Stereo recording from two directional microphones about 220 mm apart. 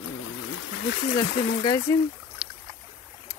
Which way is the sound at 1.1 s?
20° left (ahead or behind).